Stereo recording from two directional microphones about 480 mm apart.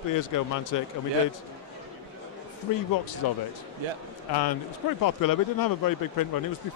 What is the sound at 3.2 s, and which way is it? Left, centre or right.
Speech, left.